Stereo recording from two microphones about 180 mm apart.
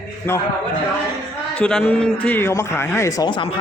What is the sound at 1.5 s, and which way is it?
A man's voice, 5° left (ahead or behind).